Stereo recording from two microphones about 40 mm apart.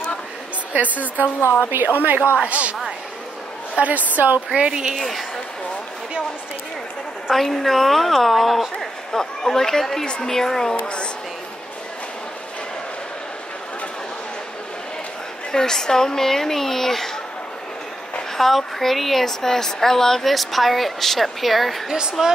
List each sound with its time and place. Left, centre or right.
0.7 s a woman's voice: right
1.7 s a woman's voice: right
2.3 s a woman's voice: right
3.7 s a woman's voice: right
4.6 s a woman's voice: right
4.9 s a woman's voice: centre
7.2 s a woman's voice: centre
8.7 s a woman's voice: centre
15.5 s speech: centre
18.4 s speech: centre
20.3 s a woman's voice: centre
22.2 s a woman's voice: centre